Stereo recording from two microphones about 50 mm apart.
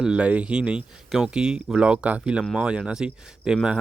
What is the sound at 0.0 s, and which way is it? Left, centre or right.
Speech, centre.